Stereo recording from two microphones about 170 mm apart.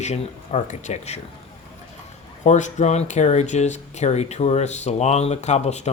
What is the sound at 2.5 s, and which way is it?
Speech, 45° left (ahead or behind).